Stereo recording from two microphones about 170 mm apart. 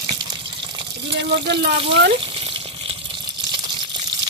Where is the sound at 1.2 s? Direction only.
90° right.